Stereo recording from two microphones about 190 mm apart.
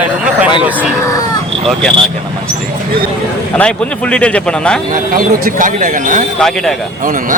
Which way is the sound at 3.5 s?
5° left (ahead or behind).